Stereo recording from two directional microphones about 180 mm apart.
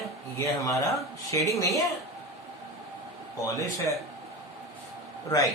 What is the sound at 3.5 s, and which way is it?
Speech, 15° left (ahead or behind).